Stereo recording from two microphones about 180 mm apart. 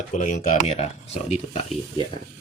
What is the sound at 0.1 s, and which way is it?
Speech, 45° left (ahead or behind).